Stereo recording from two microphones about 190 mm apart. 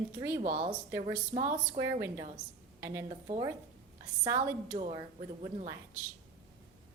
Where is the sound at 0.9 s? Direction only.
15° right (ahead or behind).